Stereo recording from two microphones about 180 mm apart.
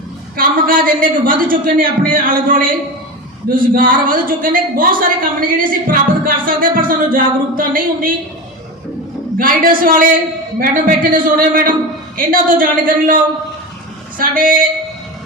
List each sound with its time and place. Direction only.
0.3 s a man's voice: 50° right (ahead or behind)
9.4 s a woman's voice: 50° right (ahead or behind)